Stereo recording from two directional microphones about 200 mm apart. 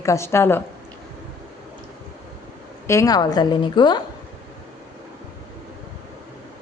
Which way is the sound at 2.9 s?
15° left (ahead or behind).